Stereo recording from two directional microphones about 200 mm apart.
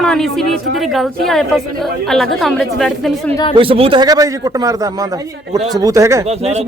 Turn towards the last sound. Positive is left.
turn(degrees=-15)  # may be behind; listen again after turning